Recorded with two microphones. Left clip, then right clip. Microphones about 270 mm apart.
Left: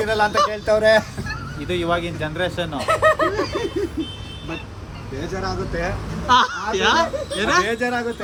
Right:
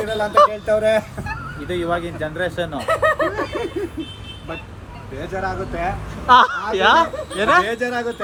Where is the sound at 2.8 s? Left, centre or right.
Left.